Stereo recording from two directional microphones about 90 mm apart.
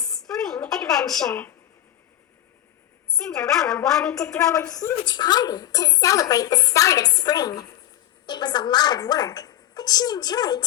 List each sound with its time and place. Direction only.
0.0 s a sound: 5° left (ahead or behind)
3.2 s a woman's voice: 5° left (ahead or behind)
4.4 s a woman's voice: 35° left (ahead or behind)
5.0 s a woman's voice: 55° left (ahead or behind)
8.3 s a woman's voice: 55° left (ahead or behind)